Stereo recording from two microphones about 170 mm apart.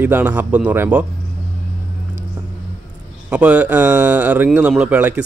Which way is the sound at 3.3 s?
5° right (ahead or behind).